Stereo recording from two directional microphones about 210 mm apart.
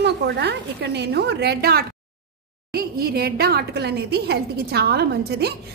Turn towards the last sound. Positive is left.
turn(degrees=-50)  # may be behind; listen again after turning